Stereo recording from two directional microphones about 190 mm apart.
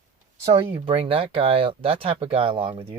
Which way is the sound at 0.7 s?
30° right (ahead or behind).